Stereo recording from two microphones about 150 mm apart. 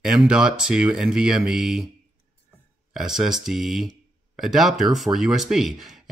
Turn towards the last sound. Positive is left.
turn(degrees=0)  # may be behind; listen again after turning